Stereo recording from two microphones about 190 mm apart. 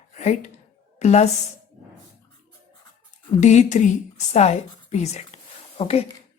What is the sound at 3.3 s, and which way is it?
A woman's voice, 40° left (ahead or behind).